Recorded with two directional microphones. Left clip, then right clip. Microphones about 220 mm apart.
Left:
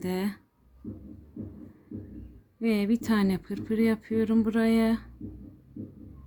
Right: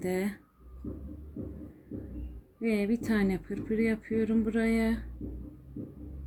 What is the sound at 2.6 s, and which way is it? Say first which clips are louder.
Speech: left 2 dB; 40° left (ahead or behind).